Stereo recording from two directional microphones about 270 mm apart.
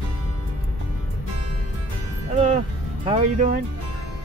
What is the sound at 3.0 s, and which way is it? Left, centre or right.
Speech, right.